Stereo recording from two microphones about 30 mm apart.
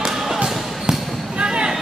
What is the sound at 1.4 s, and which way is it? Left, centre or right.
Music, right.